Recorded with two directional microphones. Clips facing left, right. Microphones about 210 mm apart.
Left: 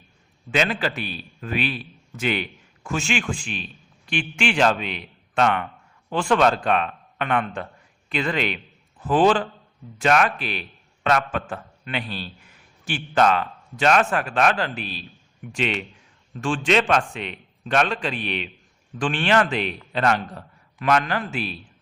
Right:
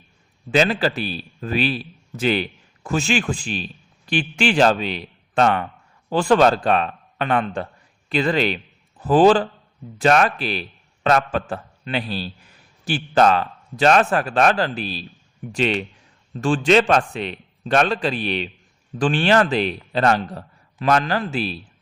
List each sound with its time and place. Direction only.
0.5 s a man's voice: 35° right (ahead or behind)